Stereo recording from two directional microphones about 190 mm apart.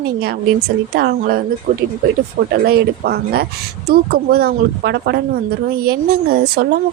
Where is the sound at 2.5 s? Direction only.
55° right (ahead or behind).